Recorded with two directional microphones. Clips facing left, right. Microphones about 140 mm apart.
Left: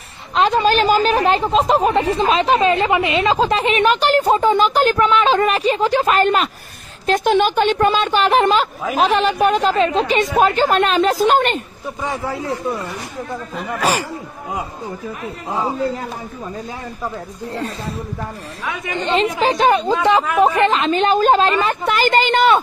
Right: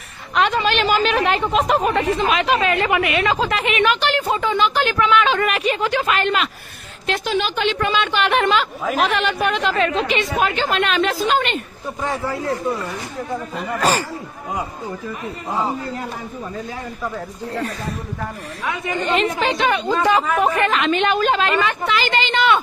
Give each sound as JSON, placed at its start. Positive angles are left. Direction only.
{"t": 0.3, "sound": "a woman's voice", "side_deg": 30}
{"t": 7.1, "sound": "speech", "side_deg": 50}
{"t": 12.0, "sound": "a man's voice", "side_deg": 15}
{"t": 13.6, "sound": "speech", "side_deg": 0}
{"t": 18.9, "sound": "a woman's voice", "side_deg": 25}
{"t": 19.4, "sound": "speech", "side_deg": 40}
{"t": 20.0, "sound": "a woman's voice", "side_deg": 25}
{"t": 20.2, "sound": "speech", "side_deg": 5}
{"t": 20.5, "sound": "speech", "side_deg": 30}